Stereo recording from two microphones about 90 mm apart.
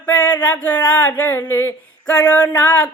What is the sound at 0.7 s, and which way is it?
Speech, 50° left (ahead or behind).